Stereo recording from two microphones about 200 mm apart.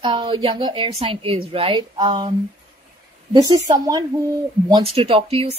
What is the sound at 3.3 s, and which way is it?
Speech, 20° right (ahead or behind).